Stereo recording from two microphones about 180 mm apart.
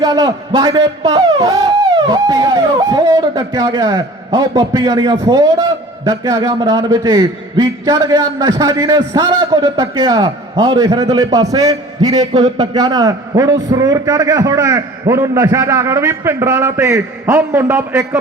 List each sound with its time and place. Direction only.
0.0 s a man's voice: 20° right (ahead or behind)
10.8 s a man's voice: 20° right (ahead or behind)